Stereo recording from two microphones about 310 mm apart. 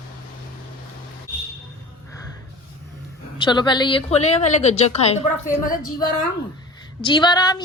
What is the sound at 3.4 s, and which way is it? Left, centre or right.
A woman's voice, centre.